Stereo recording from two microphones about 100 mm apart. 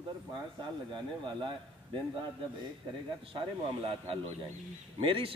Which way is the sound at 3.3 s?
60° right (ahead or behind).